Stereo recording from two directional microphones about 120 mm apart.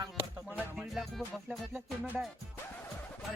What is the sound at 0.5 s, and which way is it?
Music, 5° right (ahead or behind).